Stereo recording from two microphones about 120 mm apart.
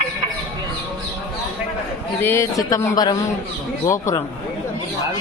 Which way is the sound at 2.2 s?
20° left (ahead or behind).